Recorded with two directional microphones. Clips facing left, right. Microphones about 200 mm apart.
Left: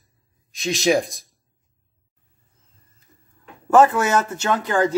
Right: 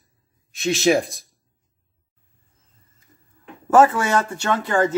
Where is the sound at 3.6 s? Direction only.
Centre (ahead or behind).